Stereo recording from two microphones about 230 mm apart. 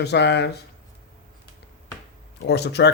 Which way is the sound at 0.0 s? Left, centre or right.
Left.